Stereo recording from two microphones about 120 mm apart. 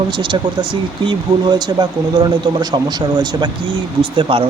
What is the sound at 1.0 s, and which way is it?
Speech, 35° right (ahead or behind).